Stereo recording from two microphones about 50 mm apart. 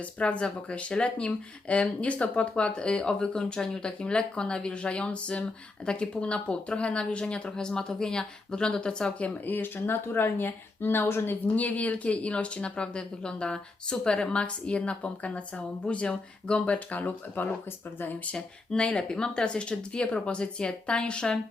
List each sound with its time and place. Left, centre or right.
0.0 s speech: left
9.5 s speech: left
11.5 s speech: left
18.3 s speech: centre